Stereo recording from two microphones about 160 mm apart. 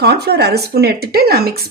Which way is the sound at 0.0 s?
90° right.